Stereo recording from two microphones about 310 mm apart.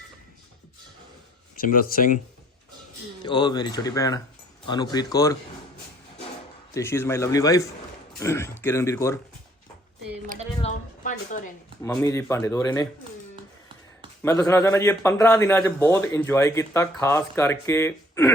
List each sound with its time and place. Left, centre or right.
1.5 s speech: left
3.2 s a man's voice: centre
6.7 s a man's voice: centre
10.6 s a sound: left
11.8 s a man's voice: centre
14.2 s a man's voice: centre